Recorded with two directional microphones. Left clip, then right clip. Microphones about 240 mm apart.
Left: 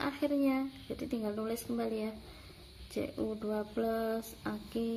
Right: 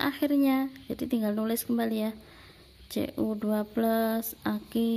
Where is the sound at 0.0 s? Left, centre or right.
Right.